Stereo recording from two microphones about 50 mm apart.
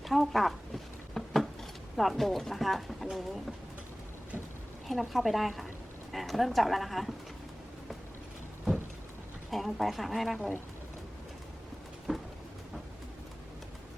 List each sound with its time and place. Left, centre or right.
0.0 s a sound: centre
2.0 s speech: centre
4.9 s speech: centre
9.5 s speech: centre
10.3 s speech: left
12.1 s a sound: centre